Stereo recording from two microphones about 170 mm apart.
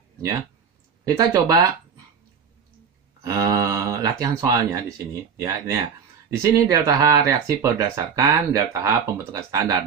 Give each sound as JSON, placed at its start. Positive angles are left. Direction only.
{"t": 1.0, "sound": "speech", "side_deg": -20}
{"t": 3.3, "sound": "speech", "side_deg": -20}